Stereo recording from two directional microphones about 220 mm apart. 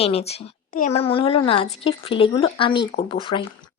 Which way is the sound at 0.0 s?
30° left (ahead or behind).